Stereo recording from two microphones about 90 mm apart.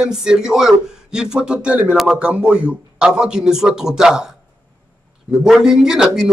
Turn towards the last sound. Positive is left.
turn(degrees=-5)  # may be behind; listen again after turning